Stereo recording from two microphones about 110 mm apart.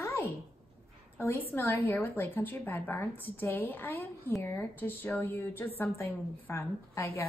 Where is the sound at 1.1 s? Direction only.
20° left (ahead or behind).